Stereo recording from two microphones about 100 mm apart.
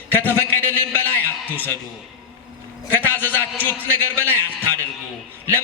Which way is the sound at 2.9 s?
20° left (ahead or behind).